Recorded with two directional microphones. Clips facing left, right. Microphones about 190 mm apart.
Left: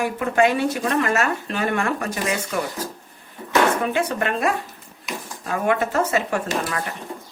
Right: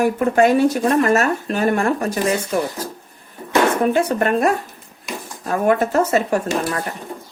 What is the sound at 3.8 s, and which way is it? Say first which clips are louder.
Speech: right 5 dB; 45° right (ahead or behind).